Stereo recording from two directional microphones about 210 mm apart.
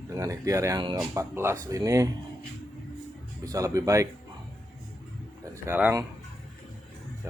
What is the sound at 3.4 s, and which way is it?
Speech, 15° right (ahead or behind).